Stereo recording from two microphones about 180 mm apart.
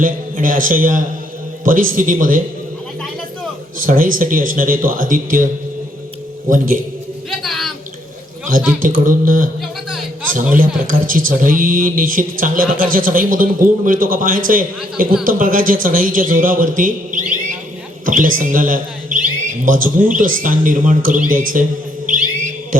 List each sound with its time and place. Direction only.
0.0 s speech: 50° right (ahead or behind)
3.8 s speech: 50° right (ahead or behind)
6.5 s speech: 50° right (ahead or behind)
7.3 s a sound: centre (ahead or behind)
8.4 s speech: 50° right (ahead or behind)
10.8 s a man's voice: 50° right (ahead or behind)